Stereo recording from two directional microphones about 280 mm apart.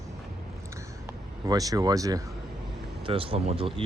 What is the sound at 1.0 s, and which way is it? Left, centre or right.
Speech, centre.